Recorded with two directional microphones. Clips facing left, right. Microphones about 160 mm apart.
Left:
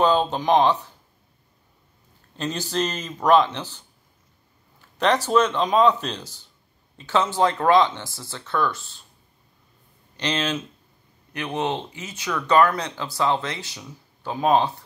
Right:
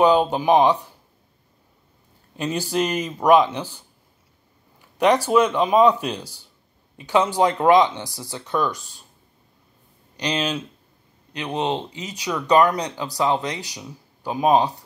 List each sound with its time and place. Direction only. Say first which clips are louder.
0.0 s speech: right 3 dB; 10° right (ahead or behind)
2.3 s speech: right 3 dB; 10° right (ahead or behind)
4.9 s speech: right 3 dB; 10° right (ahead or behind)
10.1 s speech: right 1 dB; 15° right (ahead or behind)